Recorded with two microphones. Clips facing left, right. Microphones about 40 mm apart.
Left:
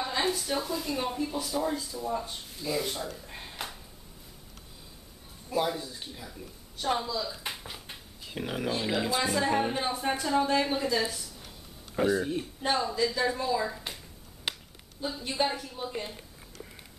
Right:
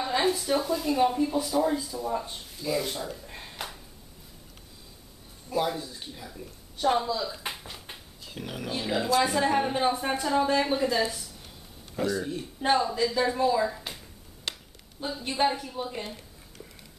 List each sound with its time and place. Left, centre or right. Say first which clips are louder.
0.0 s speech: right 3 dB; centre
5.5 s speech: right 1 dB; centre
8.3 s speech: left 3 dB; centre
9.2 s speech: right 2 dB; centre
11.9 s speech: left 2 dB; centre
12.6 s speech: right 4 dB; centre
14.5 s finger snapping: left 1 dB; centre
15.0 s speech: right 3 dB; centre